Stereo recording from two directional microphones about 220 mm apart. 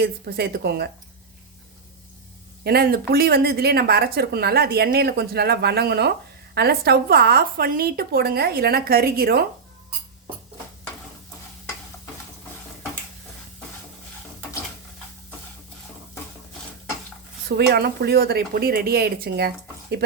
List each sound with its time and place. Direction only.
0.0 s a woman's voice: 45° right (ahead or behind)
2.6 s a woman's voice: 45° right (ahead or behind)
17.7 s a woman's voice: 45° right (ahead or behind)